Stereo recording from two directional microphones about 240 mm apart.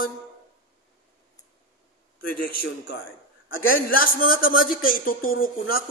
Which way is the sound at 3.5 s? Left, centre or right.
Left.